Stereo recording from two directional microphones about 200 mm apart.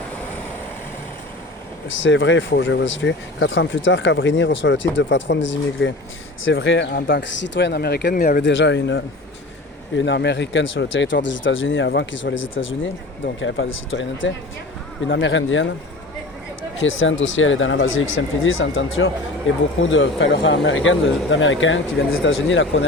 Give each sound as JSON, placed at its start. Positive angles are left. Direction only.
{"t": 1.9, "sound": "speech", "side_deg": 70}
{"t": 16.7, "sound": "speech", "side_deg": 70}